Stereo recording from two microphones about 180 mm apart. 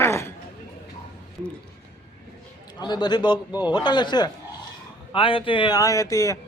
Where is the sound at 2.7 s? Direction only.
25° left (ahead or behind).